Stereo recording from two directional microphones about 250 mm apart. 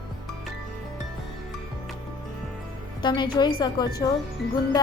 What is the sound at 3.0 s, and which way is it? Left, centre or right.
Speech, centre.